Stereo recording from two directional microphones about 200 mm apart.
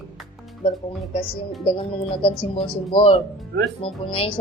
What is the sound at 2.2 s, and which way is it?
Speech, 30° left (ahead or behind).